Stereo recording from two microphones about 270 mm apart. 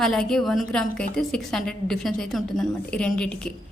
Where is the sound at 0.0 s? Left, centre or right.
Centre.